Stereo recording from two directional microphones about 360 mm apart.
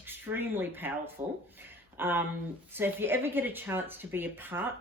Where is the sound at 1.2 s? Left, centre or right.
Centre.